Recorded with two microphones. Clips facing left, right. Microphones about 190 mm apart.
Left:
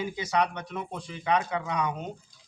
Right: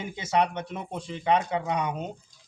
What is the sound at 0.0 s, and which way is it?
A man's voice, 25° right (ahead or behind).